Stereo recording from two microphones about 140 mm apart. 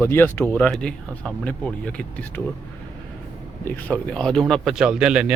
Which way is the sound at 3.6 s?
10° left (ahead or behind).